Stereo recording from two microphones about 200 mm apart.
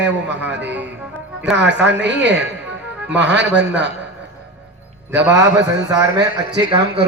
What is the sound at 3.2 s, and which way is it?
Speech, 60° right (ahead or behind).